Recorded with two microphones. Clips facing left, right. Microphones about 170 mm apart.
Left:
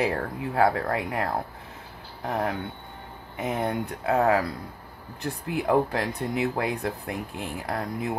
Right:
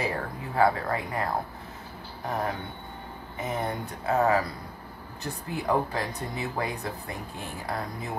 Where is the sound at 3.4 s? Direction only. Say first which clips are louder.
Left 4 dB; 65° left (ahead or behind).